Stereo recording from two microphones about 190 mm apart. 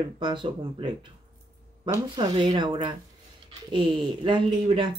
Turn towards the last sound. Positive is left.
turn(degrees=-25)  # may be behind; listen again after turning